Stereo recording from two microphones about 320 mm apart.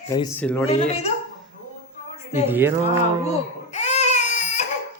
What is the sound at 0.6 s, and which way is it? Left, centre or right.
Speech, centre.